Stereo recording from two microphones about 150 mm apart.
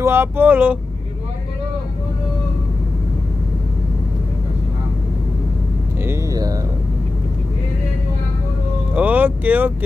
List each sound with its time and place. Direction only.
0.0 s speech: 15° right (ahead or behind)
6.0 s speech: 25° right (ahead or behind)
8.9 s speech: 10° right (ahead or behind)